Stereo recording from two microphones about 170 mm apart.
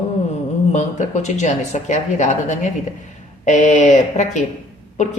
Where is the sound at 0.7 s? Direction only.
45° left (ahead or behind).